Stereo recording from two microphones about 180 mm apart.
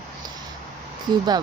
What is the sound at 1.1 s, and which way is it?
Speech, 25° right (ahead or behind).